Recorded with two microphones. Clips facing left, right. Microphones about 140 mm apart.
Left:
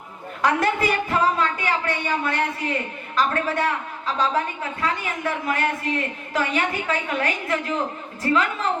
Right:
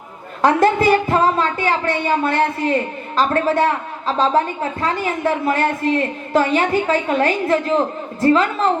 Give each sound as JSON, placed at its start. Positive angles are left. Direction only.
{"t": 0.4, "sound": "a woman's voice", "side_deg": -30}